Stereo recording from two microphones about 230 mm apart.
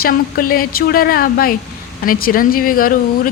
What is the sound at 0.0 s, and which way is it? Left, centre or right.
Speech, left.